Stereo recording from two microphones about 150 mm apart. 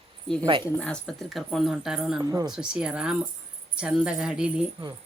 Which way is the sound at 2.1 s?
25° right (ahead or behind).